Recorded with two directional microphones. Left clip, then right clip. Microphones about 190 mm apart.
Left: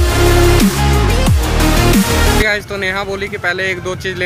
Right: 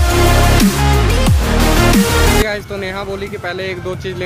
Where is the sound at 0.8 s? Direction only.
Centre (ahead or behind).